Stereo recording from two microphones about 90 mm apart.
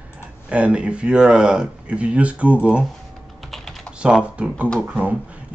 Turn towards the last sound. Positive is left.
turn(degrees=-15)  # may be behind; listen again after turning